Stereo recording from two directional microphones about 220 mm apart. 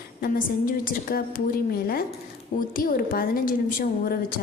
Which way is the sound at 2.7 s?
40° left (ahead or behind).